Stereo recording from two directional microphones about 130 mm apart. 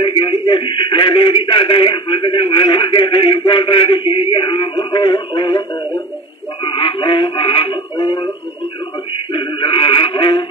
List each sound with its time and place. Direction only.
0.0 s a sound: 40° left (ahead or behind)
6.6 s synthetic singing: 45° left (ahead or behind)
9.3 s synthetic singing: 45° left (ahead or behind)